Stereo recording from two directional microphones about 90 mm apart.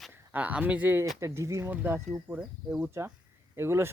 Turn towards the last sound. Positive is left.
turn(degrees=-30)  # may be behind; listen again after turning